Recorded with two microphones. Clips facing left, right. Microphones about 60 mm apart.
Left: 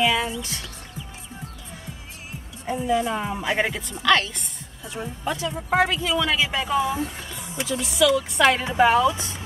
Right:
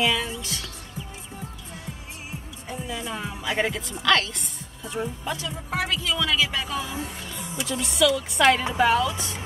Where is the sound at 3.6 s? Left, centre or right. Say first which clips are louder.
Even; centre.